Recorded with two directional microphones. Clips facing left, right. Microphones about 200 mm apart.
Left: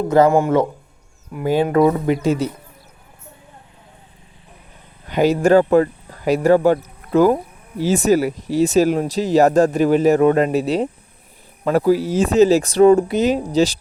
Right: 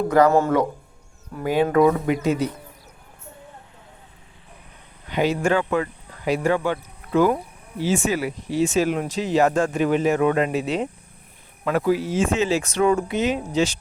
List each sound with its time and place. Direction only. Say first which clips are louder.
0.3 s speech: left 3 dB; 15° left (ahead or behind)
1.7 s speech: left 2 dB; 30° left (ahead or behind)
5.0 s speech: left 6 dB; 40° left (ahead or behind)